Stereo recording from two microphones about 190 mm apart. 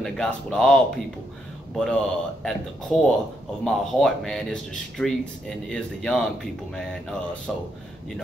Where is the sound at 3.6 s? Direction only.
Centre (ahead or behind).